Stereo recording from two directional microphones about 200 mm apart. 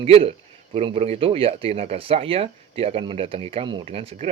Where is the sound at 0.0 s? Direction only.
30° right (ahead or behind).